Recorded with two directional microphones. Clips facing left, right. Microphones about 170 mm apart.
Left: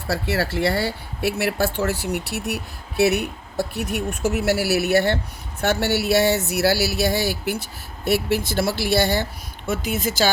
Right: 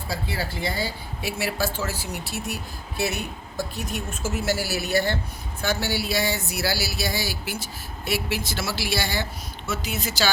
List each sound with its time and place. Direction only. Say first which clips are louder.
0.1 s a woman's voice: left 7 dB; 75° left (ahead or behind); by 10.2 s 50° left (ahead or behind)